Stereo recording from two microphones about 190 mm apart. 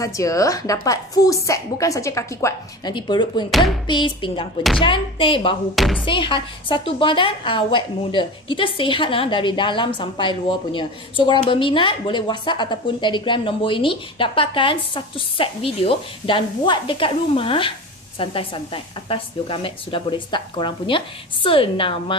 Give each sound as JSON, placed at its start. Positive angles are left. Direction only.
{"t": 0.0, "sound": "a woman's voice", "side_deg": 15}